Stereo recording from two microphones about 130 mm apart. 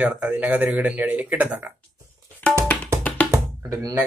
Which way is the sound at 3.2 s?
25° right (ahead or behind).